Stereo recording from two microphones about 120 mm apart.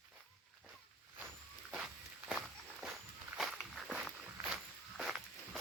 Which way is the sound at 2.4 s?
Centre (ahead or behind).